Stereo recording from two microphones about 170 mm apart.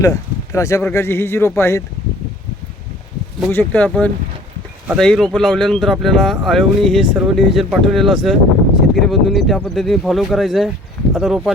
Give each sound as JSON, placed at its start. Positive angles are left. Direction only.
{"t": 0.0, "sound": "speech", "side_deg": 20}
{"t": 3.5, "sound": "speech", "side_deg": 10}